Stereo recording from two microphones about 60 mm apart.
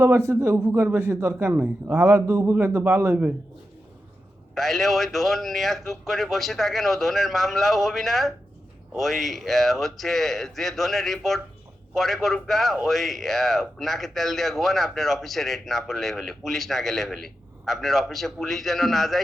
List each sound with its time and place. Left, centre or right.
0.0 s a man's voice: right
4.5 s a man's voice: centre